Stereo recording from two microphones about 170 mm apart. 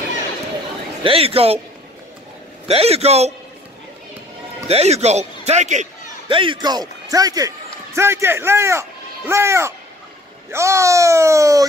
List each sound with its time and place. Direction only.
1.0 s speech: 35° right (ahead or behind)
2.7 s speech: 35° right (ahead or behind)
4.6 s speech: 40° right (ahead or behind)
6.2 s a man's voice: 30° right (ahead or behind)